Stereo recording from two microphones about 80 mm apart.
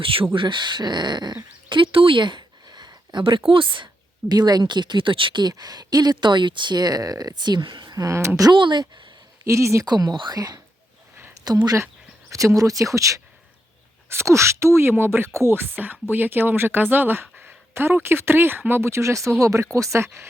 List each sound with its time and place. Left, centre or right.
0.3 s speech: right
1.7 s speech: right
4.3 s speech: right
7.9 s speech: right
8.5 s speech: right
9.4 s speech: right
9.8 s speech: right